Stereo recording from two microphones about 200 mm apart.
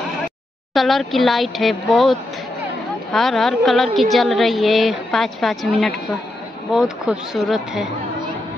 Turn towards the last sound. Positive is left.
turn(degrees=0)  # may be behind; listen again after turning